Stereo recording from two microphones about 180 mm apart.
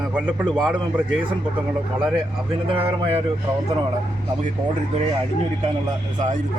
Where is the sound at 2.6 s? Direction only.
30° right (ahead or behind).